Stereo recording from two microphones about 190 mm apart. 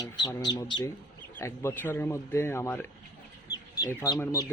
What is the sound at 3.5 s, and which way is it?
Chicken, 20° left (ahead or behind).